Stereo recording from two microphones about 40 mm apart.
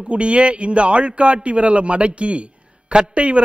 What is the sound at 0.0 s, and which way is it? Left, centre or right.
A man's voice, right.